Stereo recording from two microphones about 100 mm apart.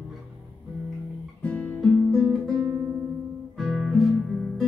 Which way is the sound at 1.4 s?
15° left (ahead or behind).